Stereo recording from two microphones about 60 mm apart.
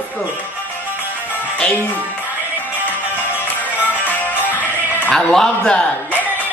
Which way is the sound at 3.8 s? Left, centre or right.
Left.